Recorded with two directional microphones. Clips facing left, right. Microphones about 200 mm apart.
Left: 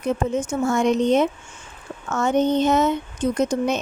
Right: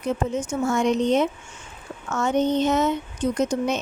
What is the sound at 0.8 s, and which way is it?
Speech, 50° left (ahead or behind).